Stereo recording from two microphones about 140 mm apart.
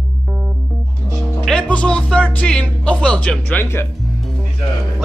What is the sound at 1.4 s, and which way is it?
Speech, 5° left (ahead or behind).